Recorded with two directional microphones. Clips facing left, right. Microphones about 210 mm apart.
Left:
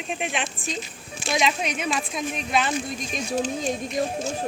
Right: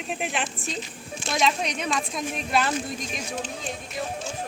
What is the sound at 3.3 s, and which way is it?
Speech, 40° left (ahead or behind).